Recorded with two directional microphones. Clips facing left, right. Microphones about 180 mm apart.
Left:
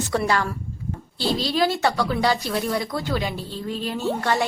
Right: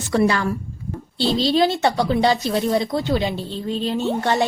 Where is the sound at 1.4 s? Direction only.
25° right (ahead or behind).